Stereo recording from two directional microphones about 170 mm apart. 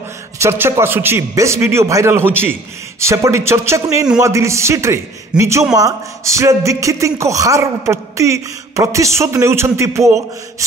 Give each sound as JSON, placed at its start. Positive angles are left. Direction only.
{"t": 0.4, "sound": "speech", "side_deg": -15}